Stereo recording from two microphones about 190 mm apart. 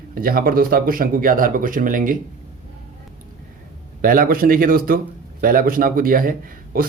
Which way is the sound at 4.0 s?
50° right (ahead or behind).